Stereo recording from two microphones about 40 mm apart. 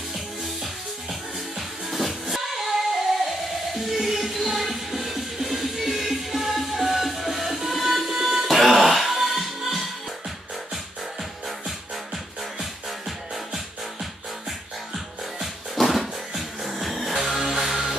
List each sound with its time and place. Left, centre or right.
1.9 s music: centre
15.4 s music: centre